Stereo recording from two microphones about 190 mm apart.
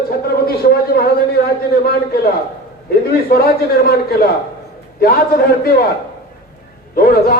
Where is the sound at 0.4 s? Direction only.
55° left (ahead or behind).